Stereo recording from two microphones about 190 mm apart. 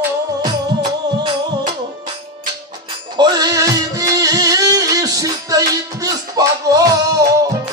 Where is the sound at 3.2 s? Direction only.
20° right (ahead or behind).